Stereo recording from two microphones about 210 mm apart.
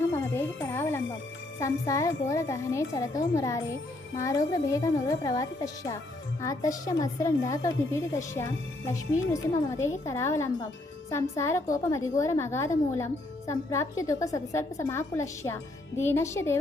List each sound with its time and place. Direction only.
0.1 s music: 10° left (ahead or behind)
1.5 s a woman's voice: 15° left (ahead or behind)